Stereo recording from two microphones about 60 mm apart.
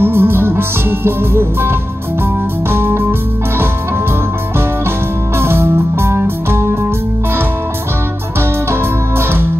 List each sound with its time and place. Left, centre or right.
0.0 s music: right
5.4 s music: right